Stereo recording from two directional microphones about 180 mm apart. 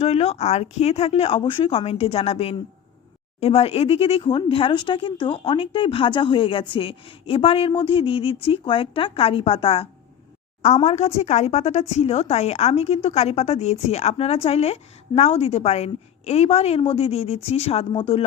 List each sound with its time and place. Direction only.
0.0 s a woman's voice: 35° left (ahead or behind)
10.8 s a woman's voice: 35° left (ahead or behind)